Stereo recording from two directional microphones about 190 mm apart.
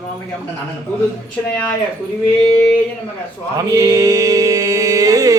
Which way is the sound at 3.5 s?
15° right (ahead or behind).